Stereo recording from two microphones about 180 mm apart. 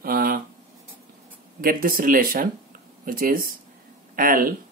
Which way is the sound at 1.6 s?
50° right (ahead or behind).